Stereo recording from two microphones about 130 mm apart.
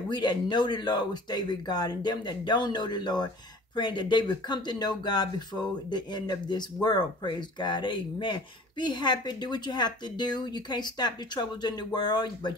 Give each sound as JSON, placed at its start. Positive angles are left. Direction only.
{"t": 0.1, "sound": "speech", "side_deg": 35}